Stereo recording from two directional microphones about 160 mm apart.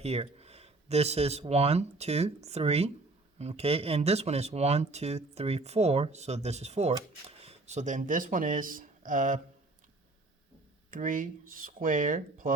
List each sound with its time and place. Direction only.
0.0 s speech: 40° right (ahead or behind)
10.9 s speech: 55° right (ahead or behind)